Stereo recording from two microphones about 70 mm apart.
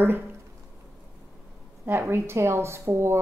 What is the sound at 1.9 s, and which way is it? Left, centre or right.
A woman's voice, right.